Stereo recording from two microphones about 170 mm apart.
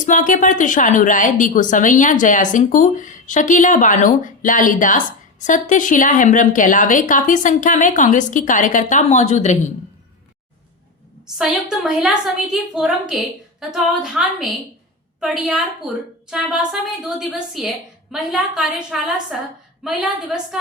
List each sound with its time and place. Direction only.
0.0 s a woman's voice: 50° left (ahead or behind)
11.3 s a woman's voice: centre (ahead or behind)